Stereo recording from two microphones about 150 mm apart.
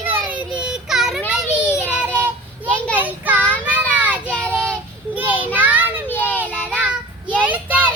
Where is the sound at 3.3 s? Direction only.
10° left (ahead or behind).